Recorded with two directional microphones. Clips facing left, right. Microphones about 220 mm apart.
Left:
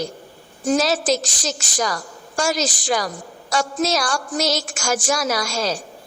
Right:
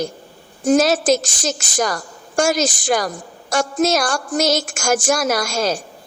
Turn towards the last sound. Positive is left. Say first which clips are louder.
# right 3 dB
turn(degrees=-50)  # may be behind; listen again after turning